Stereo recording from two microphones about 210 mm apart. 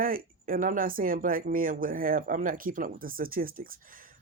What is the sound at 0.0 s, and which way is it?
Speech, 40° right (ahead or behind).